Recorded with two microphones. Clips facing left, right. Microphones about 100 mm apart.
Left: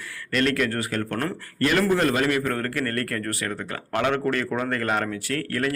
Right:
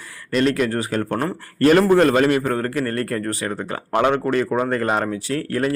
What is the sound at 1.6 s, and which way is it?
Speech, 40° right (ahead or behind).